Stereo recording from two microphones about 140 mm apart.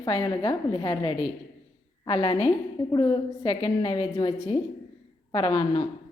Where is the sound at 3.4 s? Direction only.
40° left (ahead or behind).